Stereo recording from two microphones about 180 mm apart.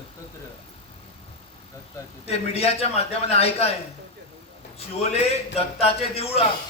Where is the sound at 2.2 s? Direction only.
35° left (ahead or behind).